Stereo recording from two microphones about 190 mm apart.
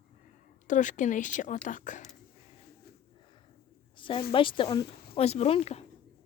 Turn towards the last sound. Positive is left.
turn(degrees=35)  # may be behind; listen again after turning